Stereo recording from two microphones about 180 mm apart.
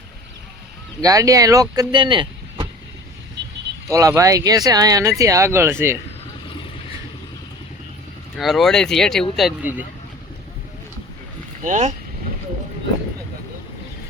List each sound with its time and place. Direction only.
1.0 s speech: 20° right (ahead or behind)
3.8 s speech: 15° right (ahead or behind)
8.4 s speech: centre (ahead or behind)
11.6 s speech: 40° right (ahead or behind)